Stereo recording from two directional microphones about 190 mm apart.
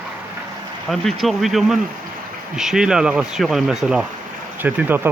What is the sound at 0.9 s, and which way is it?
Speech, centre (ahead or behind).